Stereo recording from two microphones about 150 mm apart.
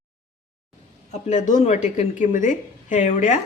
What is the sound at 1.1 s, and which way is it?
Speech, 55° left (ahead or behind).